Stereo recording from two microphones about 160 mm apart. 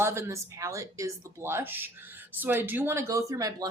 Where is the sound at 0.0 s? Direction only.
15° right (ahead or behind).